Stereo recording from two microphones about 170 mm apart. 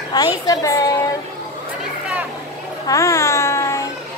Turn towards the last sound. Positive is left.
turn(degrees=15)  # may be behind; listen again after turning